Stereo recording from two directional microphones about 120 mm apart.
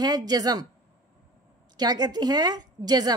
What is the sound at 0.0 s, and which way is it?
Speech, 35° right (ahead or behind).